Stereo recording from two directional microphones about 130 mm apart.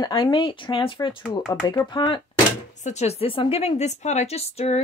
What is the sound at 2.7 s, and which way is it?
A woman's voice, 65° left (ahead or behind).